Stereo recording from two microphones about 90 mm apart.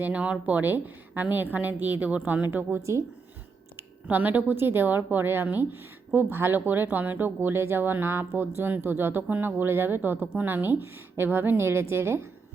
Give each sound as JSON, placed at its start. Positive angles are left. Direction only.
{"t": 0.0, "sound": "speech", "side_deg": -15}
{"t": 4.0, "sound": "speech", "side_deg": -20}